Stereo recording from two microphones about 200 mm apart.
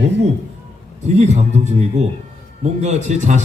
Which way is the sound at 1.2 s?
35° right (ahead or behind).